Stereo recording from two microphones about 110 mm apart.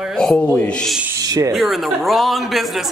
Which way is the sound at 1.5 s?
Centre (ahead or behind).